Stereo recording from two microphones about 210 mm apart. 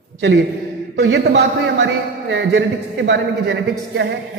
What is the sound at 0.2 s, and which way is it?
A man's voice, 55° right (ahead or behind).